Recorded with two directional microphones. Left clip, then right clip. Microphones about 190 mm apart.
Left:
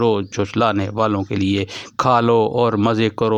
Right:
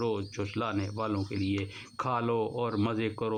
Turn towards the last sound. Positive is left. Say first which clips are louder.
# left 14 dB
turn(degrees=40)  # may be behind; listen again after turning